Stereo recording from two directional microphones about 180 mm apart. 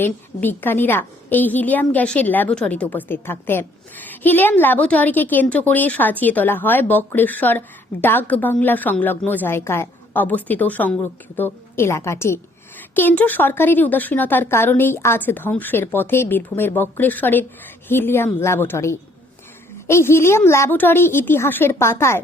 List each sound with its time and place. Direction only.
0.0 s a woman's voice: 10° left (ahead or behind)